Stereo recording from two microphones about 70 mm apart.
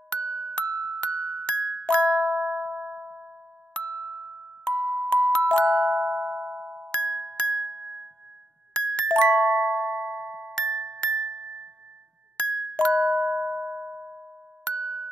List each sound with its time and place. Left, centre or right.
0.1 s music: centre
3.0 s music: centre
3.7 s music: centre
6.6 s music: centre
6.9 s music: centre
10.2 s glockenspiel: right
10.5 s music: centre
13.8 s music: centre
14.6 s a sound: centre